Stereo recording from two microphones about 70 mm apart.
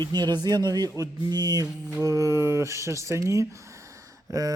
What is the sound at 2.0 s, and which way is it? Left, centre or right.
Speech, right.